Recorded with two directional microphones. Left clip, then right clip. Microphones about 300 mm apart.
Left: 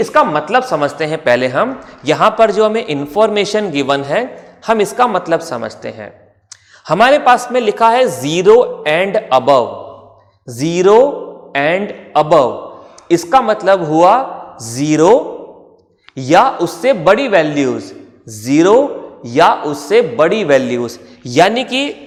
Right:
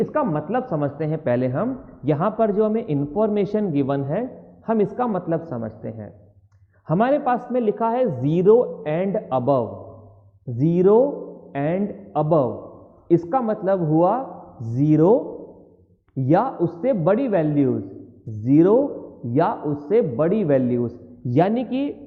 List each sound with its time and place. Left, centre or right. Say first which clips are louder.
0.0 s speech: left 11 dB; centre
10.9 s a man's voice: left 8 dB; left
11.5 s a man's voice: left 10 dB; centre
12.3 s a man's voice: left 8 dB; left
13.1 s speech: left 9 dB; centre
15.0 s speech: left 10 dB; left
16.1 s speech: left 10 dB; centre